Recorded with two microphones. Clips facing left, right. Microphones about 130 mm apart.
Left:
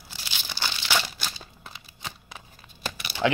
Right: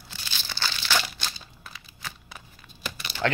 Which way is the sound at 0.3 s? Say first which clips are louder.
Even; 15° left (ahead or behind).